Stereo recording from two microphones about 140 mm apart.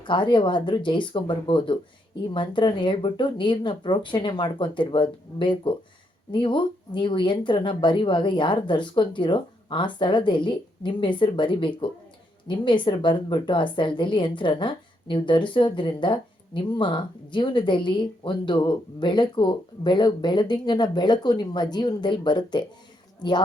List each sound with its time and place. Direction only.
0.0 s speech: 35° left (ahead or behind)